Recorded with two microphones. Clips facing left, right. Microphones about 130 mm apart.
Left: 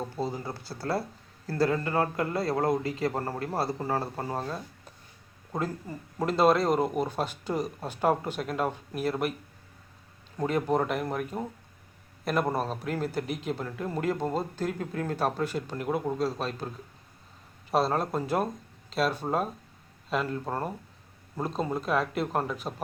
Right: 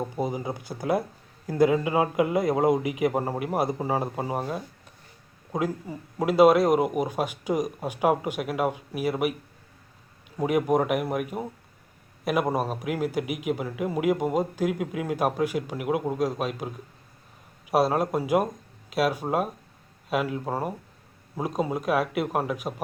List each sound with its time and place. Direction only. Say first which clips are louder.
0.0 s a man's voice: right 4 dB; 15° right (ahead or behind)
10.3 s a man's voice: right 4 dB; 10° right (ahead or behind)